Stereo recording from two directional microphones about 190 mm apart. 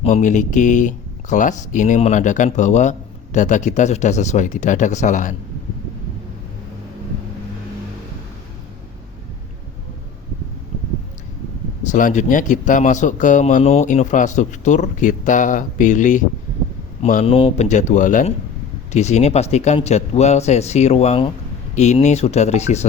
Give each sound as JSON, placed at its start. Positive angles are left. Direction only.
{"t": 0.0, "sound": "a man's voice", "side_deg": 40}
{"t": 11.9, "sound": "a man's voice", "side_deg": 45}